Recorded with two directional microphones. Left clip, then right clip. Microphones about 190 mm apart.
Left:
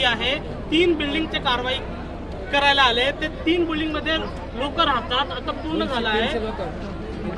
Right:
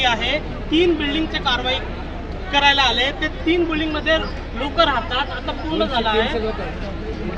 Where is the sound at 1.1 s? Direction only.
30° left (ahead or behind).